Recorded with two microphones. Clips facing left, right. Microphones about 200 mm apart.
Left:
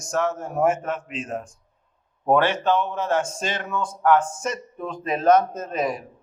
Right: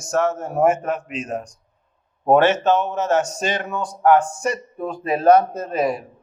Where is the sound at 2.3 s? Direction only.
20° right (ahead or behind).